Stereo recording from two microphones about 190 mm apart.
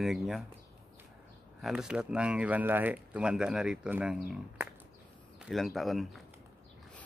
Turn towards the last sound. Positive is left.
turn(degrees=0)  # may be behind; listen again after turning